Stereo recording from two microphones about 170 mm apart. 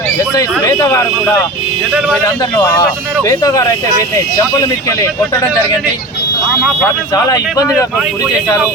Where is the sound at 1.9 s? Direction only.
5° right (ahead or behind).